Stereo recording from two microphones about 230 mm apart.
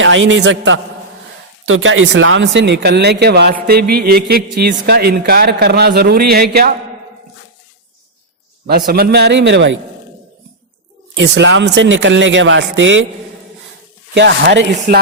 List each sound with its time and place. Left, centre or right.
0.0 s a man's voice: right
3.7 s a sound: right
4.5 s speech: right
8.9 s speech: right
11.1 s speech: right
14.1 s speech: right